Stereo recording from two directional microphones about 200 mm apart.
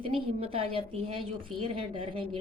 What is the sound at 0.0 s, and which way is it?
Speech, 30° right (ahead or behind).